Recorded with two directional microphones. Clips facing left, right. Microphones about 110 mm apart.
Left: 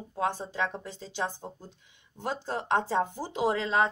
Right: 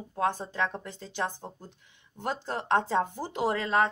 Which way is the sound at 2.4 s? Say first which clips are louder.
Right 1 dB; 15° left (ahead or behind).